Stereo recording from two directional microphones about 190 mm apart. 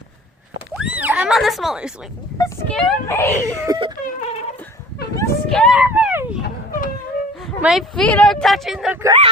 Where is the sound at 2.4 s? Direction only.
15° left (ahead or behind).